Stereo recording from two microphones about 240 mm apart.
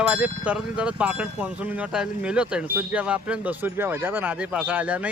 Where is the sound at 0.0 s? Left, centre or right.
Centre.